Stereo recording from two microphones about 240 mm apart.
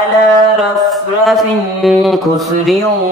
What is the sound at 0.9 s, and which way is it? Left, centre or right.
Mantra, centre.